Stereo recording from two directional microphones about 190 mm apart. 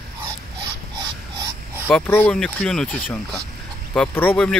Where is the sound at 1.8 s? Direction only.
10° left (ahead or behind).